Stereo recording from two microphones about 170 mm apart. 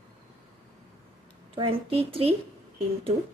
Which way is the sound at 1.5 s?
35° right (ahead or behind).